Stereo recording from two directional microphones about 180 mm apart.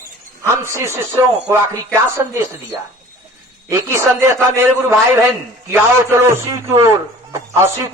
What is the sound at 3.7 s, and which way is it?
A man's voice, 15° right (ahead or behind).